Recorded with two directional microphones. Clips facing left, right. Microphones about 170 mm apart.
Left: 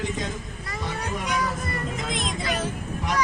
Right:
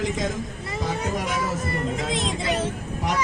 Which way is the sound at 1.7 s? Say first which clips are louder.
Right 4 dB; 30° right (ahead or behind).